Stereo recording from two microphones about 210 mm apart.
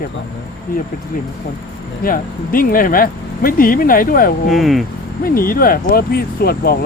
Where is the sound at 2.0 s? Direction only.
40° left (ahead or behind).